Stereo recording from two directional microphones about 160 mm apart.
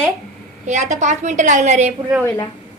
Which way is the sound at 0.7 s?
45° right (ahead or behind).